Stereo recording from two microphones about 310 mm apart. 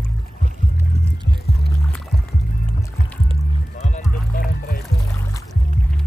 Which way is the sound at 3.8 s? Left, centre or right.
Left.